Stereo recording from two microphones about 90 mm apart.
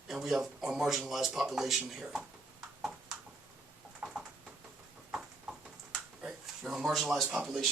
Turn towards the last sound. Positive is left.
turn(degrees=0)  # may be behind; listen again after turning